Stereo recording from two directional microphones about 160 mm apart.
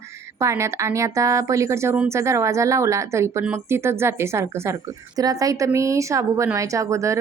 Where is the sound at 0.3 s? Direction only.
15° right (ahead or behind).